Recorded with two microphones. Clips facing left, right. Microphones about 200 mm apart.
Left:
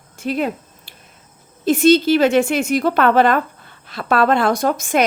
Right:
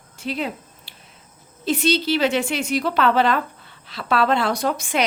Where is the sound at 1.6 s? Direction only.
50° left (ahead or behind).